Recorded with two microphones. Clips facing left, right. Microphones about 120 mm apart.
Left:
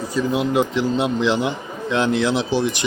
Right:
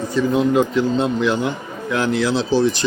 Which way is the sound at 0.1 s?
10° left (ahead or behind).